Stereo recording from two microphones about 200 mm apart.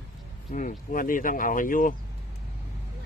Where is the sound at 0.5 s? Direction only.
40° left (ahead or behind).